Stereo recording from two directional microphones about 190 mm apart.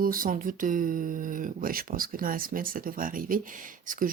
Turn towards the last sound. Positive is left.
turn(degrees=-45)  # may be behind; listen again after turning